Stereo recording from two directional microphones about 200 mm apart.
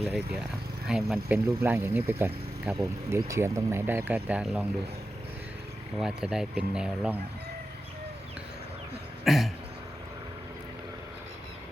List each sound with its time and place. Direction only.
0.9 s speech: 5° right (ahead or behind)
6.0 s speech: 5° right (ahead or behind)
9.2 s throat clearing: centre (ahead or behind)